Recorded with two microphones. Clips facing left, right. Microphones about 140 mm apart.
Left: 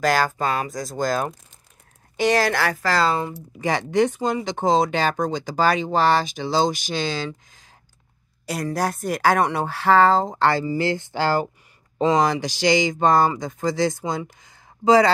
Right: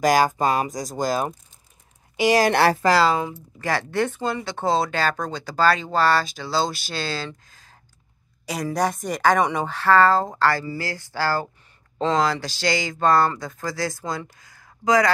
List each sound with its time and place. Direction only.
0.0 s speech: 15° right (ahead or behind)
2.5 s speech: 30° right (ahead or behind)
2.9 s speech: 5° right (ahead or behind)
3.5 s speech: 15° left (ahead or behind)
8.5 s speech: centre (ahead or behind); by 15.0 s 25° left (ahead or behind)